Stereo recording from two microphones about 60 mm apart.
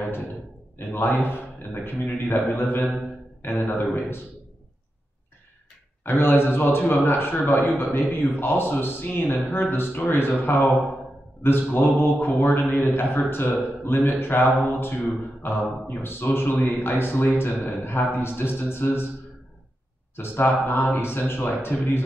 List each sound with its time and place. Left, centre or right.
0.7 s a man's voice: left
6.0 s a man's voice: left
11.7 s a man's voice: left
20.2 s a man's voice: left